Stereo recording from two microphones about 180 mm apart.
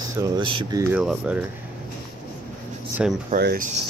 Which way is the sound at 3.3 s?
55° right (ahead or behind).